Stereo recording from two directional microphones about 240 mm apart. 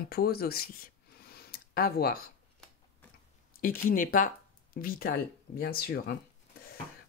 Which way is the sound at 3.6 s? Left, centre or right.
Left.